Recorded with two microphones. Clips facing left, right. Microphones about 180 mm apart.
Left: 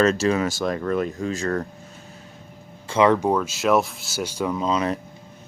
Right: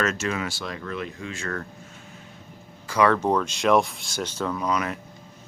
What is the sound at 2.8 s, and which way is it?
Speech, 25° left (ahead or behind).